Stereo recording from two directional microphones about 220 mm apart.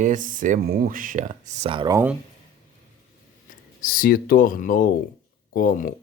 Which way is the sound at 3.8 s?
40° left (ahead or behind).